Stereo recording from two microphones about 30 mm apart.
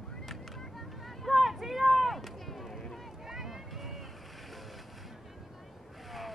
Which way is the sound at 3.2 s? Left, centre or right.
Centre.